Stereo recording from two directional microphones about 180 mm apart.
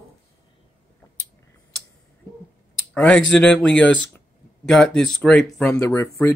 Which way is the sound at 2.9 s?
5° left (ahead or behind).